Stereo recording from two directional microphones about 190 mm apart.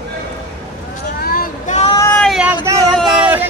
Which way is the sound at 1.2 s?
50° left (ahead or behind).